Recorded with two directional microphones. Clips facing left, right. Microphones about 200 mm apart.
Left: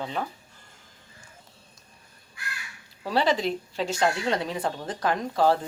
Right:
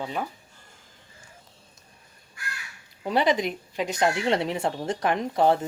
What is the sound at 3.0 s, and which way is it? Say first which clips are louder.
A woman's voice: right 1 dB; 20° right (ahead or behind).